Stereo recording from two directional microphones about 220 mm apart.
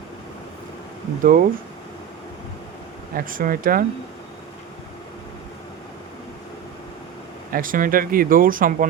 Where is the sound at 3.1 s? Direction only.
40° right (ahead or behind).